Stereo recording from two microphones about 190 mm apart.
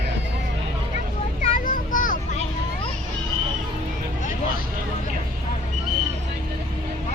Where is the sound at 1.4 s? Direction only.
45° left (ahead or behind).